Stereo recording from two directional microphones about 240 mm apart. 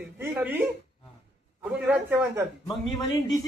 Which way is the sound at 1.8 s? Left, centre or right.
Centre.